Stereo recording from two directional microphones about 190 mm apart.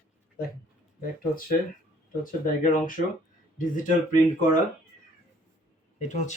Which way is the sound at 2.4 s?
45° left (ahead or behind).